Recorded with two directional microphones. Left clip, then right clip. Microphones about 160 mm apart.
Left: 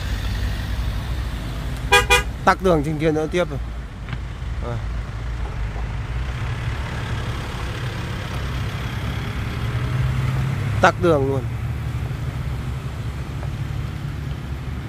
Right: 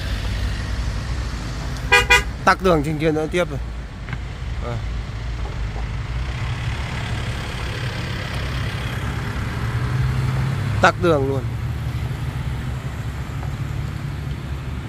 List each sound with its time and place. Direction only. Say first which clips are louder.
1.9 s car: right 1 dB; 25° left (ahead or behind)
2.4 s speech: right 1 dB; 10° left (ahead or behind)
7.7 s vehicle: right 2 dB; 65° left (ahead or behind)
10.8 s speech: even; 10° left (ahead or behind)